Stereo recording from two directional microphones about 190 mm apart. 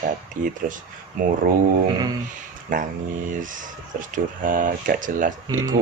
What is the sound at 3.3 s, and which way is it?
Speech, 45° right (ahead or behind).